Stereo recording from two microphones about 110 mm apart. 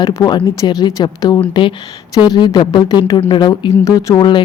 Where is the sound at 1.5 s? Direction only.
50° left (ahead or behind).